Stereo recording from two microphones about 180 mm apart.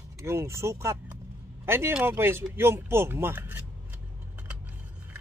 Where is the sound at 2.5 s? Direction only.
15° right (ahead or behind).